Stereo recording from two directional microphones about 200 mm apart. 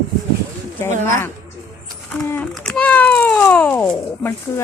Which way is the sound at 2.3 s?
5° left (ahead or behind).